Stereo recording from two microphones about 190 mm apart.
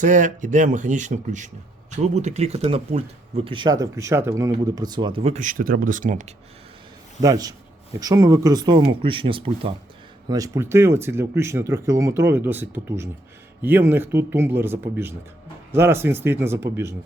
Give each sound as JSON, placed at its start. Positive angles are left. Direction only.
{"t": 0.0, "sound": "speech", "side_deg": -40}
{"t": 7.2, "sound": "speech", "side_deg": -20}